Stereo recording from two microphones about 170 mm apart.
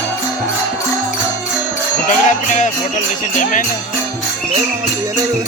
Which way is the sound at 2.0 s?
50° left (ahead or behind).